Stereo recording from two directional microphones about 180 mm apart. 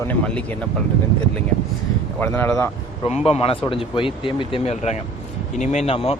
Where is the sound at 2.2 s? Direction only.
15° left (ahead or behind).